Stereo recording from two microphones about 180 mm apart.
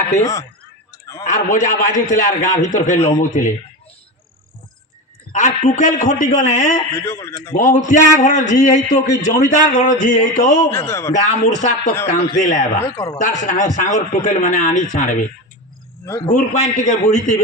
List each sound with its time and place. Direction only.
0.2 s a man's voice: 15° left (ahead or behind)
0.9 s a sound: 20° left (ahead or behind)
1.2 s a man's voice: 45° left (ahead or behind)
5.3 s a man's voice: 45° left (ahead or behind)
7.0 s a man's voice: 15° left (ahead or behind)
7.5 s a man's voice: 45° left (ahead or behind)
10.7 s a man's voice: 15° left (ahead or behind)
11.1 s a man's voice: 45° left (ahead or behind)
12.8 s a man's voice: 15° left (ahead or behind)
13.1 s a man's voice: 45° left (ahead or behind)
16.0 s a man's voice: 15° left (ahead or behind)
16.3 s a man's voice: 45° left (ahead or behind)